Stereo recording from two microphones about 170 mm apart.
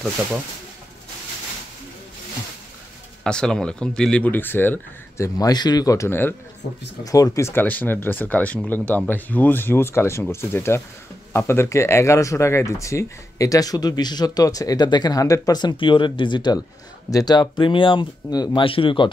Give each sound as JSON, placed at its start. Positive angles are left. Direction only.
{"t": 3.3, "sound": "speech", "side_deg": 5}